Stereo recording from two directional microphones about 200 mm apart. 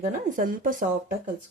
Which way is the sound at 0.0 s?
45° right (ahead or behind).